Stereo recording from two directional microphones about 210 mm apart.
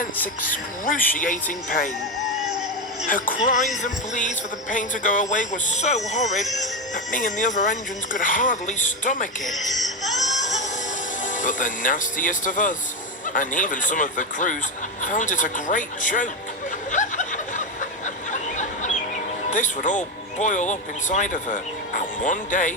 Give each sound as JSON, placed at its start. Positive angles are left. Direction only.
{"t": 0.5, "sound": "speech", "side_deg": 40}
{"t": 3.1, "sound": "speech", "side_deg": 40}
{"t": 9.5, "sound": "speech", "side_deg": 0}
{"t": 10.2, "sound": "music", "side_deg": 35}
{"t": 11.3, "sound": "speech", "side_deg": 40}
{"t": 16.9, "sound": "snicker", "side_deg": 35}
{"t": 19.5, "sound": "speech", "side_deg": 35}